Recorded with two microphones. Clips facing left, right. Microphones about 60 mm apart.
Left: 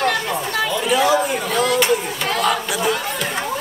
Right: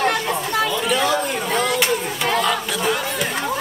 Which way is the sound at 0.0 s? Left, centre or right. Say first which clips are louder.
Even; centre.